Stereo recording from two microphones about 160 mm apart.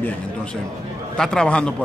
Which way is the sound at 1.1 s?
5° left (ahead or behind).